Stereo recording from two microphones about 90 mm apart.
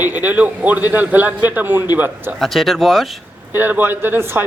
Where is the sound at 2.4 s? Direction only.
Centre (ahead or behind).